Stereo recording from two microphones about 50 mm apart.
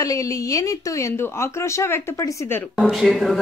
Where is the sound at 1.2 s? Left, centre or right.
Left.